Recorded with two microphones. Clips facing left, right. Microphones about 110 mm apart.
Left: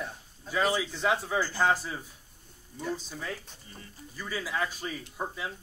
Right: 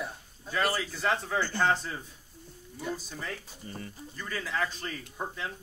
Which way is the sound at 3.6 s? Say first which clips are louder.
Right 10 dB; 65° right (ahead or behind).